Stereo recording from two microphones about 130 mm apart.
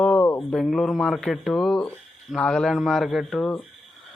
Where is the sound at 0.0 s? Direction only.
10° left (ahead or behind).